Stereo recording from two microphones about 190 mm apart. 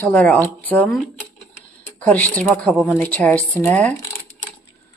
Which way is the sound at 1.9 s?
10° left (ahead or behind).